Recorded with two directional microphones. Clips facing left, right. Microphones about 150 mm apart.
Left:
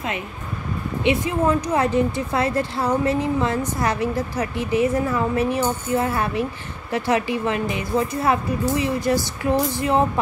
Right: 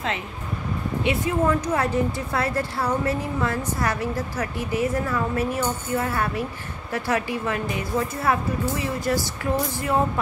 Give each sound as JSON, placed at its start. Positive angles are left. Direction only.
{"t": 1.0, "sound": "a woman's voice", "side_deg": 20}